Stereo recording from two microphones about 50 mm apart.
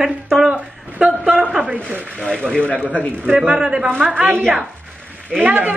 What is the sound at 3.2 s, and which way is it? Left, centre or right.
Speech, centre.